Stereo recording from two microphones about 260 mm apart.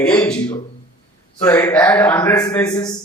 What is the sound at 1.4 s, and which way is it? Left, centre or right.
A man's voice, centre.